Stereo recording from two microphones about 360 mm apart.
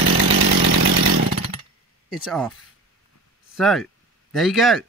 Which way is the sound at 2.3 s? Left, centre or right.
Centre.